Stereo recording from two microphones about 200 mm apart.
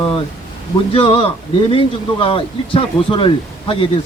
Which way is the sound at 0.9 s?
25° left (ahead or behind).